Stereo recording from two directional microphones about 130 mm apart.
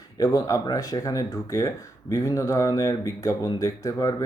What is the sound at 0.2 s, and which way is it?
Speech, 30° left (ahead or behind).